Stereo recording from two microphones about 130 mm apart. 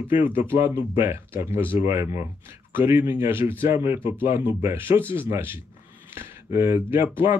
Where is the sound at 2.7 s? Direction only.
15° right (ahead or behind).